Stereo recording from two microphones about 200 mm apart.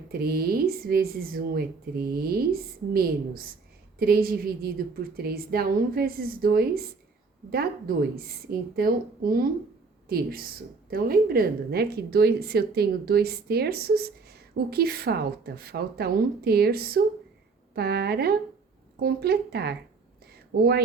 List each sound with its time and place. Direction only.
0.1 s a woman's voice: 50° right (ahead or behind)